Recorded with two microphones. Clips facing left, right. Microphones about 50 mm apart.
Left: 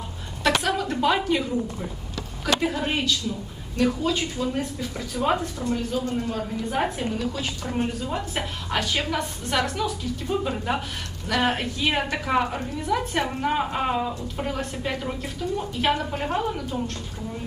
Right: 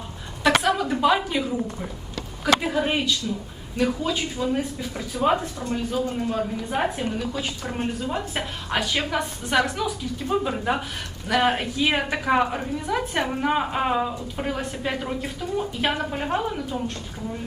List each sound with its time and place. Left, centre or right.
0.4 s a sound: centre
2.4 s a woman's voice: centre
5.4 s a woman's voice: right
5.7 s a woman's voice: centre